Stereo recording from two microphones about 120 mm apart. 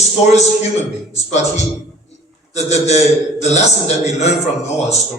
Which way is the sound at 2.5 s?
65° left (ahead or behind).